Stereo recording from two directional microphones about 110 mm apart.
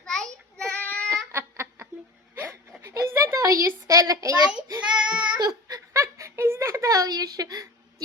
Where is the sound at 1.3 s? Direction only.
25° right (ahead or behind).